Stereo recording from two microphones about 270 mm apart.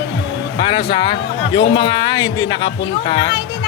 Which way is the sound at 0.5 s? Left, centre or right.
Centre.